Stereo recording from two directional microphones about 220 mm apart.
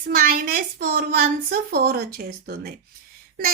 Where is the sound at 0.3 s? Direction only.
40° right (ahead or behind).